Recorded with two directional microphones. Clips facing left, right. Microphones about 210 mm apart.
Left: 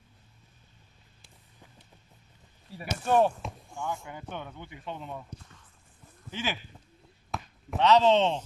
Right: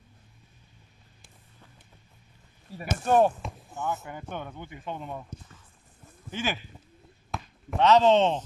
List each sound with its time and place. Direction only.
2.7 s speech: 45° right (ahead or behind)
6.3 s speech: 50° right (ahead or behind)
7.2 s chop: centre (ahead or behind)
7.8 s speech: 50° right (ahead or behind)